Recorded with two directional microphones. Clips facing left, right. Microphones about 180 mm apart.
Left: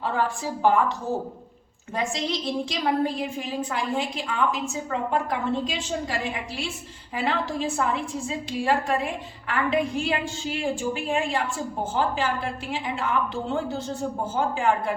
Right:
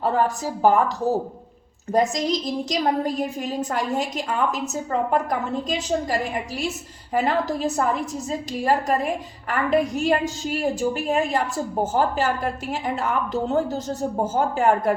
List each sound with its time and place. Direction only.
0.0 s a woman's voice: 40° right (ahead or behind)
1.9 s a woman's voice: 40° right (ahead or behind)